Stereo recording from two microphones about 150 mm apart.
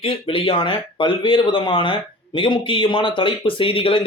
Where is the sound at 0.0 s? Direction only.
35° left (ahead or behind).